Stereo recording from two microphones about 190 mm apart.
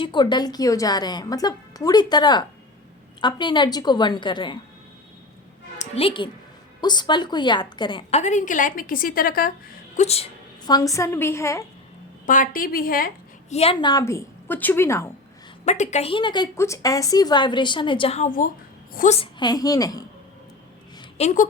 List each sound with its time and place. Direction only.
0.0 s a woman's voice: 25° left (ahead or behind)
5.8 s a woman's voice: 30° left (ahead or behind)
8.2 s a woman's voice: 40° left (ahead or behind)
10.0 s a woman's voice: 35° left (ahead or behind)
10.7 s a woman's voice: 20° left (ahead or behind)
12.2 s a woman's voice: 45° left (ahead or behind)
13.5 s a woman's voice: 30° left (ahead or behind)
13.9 s a woman's voice: 15° left (ahead or behind)
15.6 s a woman's voice: 35° left (ahead or behind); by 20.1 s 20° left (ahead or behind)
21.2 s a woman's voice: 40° left (ahead or behind)